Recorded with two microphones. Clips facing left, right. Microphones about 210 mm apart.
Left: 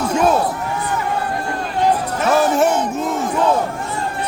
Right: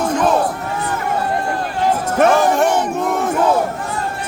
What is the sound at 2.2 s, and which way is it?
Music, 65° right (ahead or behind).